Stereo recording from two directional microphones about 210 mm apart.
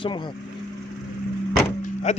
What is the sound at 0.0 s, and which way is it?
Speech, 20° left (ahead or behind).